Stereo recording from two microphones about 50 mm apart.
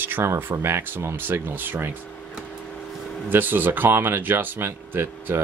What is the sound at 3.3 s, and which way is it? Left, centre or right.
Speech, right.